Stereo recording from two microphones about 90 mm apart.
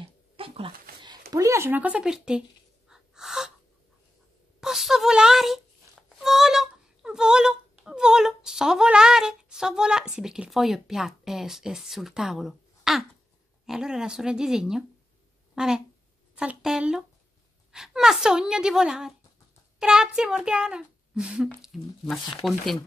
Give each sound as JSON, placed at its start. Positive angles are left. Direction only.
{"t": 0.4, "sound": "a sound", "side_deg": -90}
{"t": 1.0, "sound": "a sound", "side_deg": -45}
{"t": 1.7, "sound": "a child's voice", "side_deg": -15}
{"t": 2.0, "sound": "a child's voice", "side_deg": -5}
{"t": 2.9, "sound": "gasp", "side_deg": -5}
{"t": 4.6, "sound": "a child's voice", "side_deg": -5}